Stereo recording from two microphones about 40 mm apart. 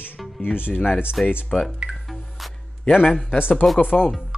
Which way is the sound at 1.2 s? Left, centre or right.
Centre.